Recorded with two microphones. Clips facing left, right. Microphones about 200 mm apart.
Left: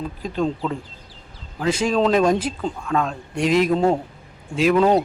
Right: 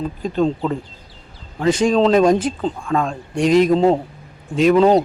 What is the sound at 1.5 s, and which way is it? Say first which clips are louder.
A man's voice: right 4 dB; 5° left (ahead or behind).